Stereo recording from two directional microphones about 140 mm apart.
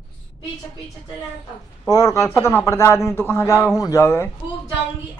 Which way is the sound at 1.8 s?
25° left (ahead or behind).